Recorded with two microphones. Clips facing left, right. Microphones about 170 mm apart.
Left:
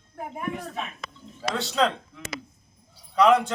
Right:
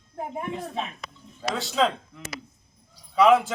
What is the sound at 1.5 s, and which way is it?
Speech, centre (ahead or behind).